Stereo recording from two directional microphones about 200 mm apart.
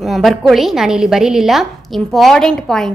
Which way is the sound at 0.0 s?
Centre (ahead or behind).